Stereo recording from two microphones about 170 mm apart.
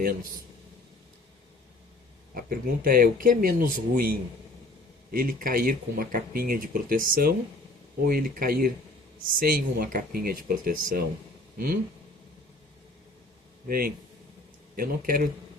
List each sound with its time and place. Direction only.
2.3 s speech: 60° right (ahead or behind)
5.1 s speech: 55° right (ahead or behind)
13.7 s speech: 60° right (ahead or behind)